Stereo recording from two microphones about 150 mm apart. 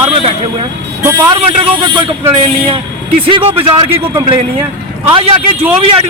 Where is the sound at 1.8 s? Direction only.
30° right (ahead or behind).